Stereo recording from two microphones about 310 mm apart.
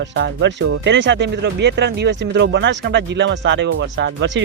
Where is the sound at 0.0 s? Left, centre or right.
Right.